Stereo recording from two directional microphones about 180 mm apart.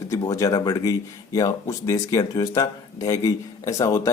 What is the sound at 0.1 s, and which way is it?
Speech, 20° left (ahead or behind).